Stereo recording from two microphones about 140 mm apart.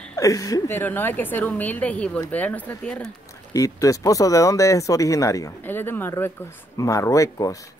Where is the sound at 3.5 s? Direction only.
25° left (ahead or behind).